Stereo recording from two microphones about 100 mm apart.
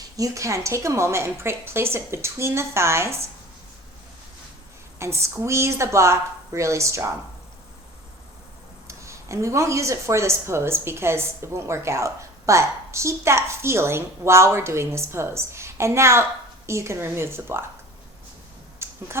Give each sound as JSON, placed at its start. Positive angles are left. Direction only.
{"t": 0.2, "sound": "speech", "side_deg": -30}
{"t": 4.9, "sound": "speech", "side_deg": -25}
{"t": 8.9, "sound": "speech", "side_deg": -30}
{"t": 18.8, "sound": "a sound", "side_deg": -25}